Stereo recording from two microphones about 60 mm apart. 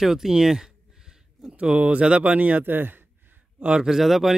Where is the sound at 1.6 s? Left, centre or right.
Right.